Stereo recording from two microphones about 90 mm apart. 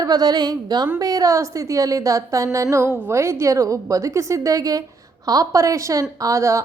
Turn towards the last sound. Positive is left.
turn(degrees=-35)  # may be behind; listen again after turning